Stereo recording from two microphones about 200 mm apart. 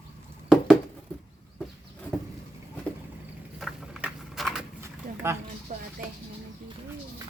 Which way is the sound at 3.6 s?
Centre (ahead or behind).